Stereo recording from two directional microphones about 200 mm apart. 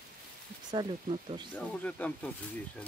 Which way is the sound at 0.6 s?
25° right (ahead or behind).